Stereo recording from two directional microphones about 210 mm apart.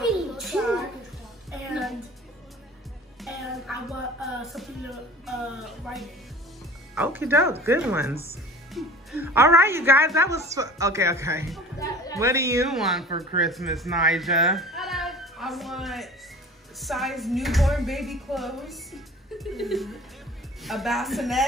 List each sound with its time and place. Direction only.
0.0 s a sound: centre (ahead or behind)
1.5 s music: centre (ahead or behind)
3.2 s music: centre (ahead or behind)
7.0 s speech: 10° right (ahead or behind)
8.8 s music: centre (ahead or behind)
9.2 s a woman's voice: 10° right (ahead or behind)
12.6 s a woman's voice: centre (ahead or behind)